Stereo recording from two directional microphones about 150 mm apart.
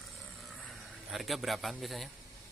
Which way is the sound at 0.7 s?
Centre (ahead or behind).